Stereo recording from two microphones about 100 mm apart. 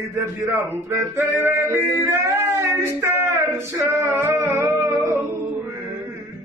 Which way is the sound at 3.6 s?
25° right (ahead or behind).